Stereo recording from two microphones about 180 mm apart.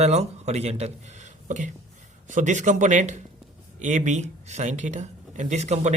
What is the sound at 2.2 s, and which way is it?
Speech, 40° right (ahead or behind).